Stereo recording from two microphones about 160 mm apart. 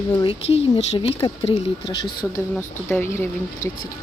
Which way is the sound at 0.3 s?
40° left (ahead or behind).